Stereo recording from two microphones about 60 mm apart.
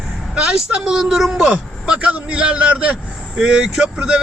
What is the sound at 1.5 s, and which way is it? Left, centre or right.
A man's voice, centre.